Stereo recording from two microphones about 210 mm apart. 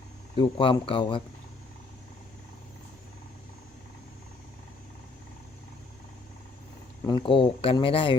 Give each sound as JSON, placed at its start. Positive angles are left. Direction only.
{"t": 0.3, "sound": "speech", "side_deg": 25}
{"t": 7.2, "sound": "speech", "side_deg": 25}